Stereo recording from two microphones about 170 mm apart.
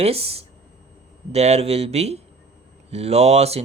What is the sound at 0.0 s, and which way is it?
Speech, 35° right (ahead or behind).